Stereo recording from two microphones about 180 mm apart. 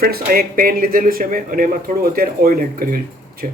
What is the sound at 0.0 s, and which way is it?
A man's voice, 55° right (ahead or behind).